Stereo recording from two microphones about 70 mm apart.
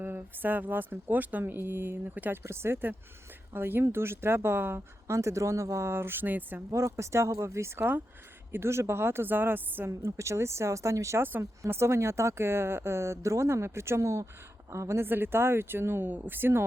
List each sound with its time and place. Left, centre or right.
0.0 s speech: right
2.4 s speech: right
6.7 s speech: right
10.1 s speech: right
11.2 s speech: right
11.6 s speech: right
15.0 s speech: right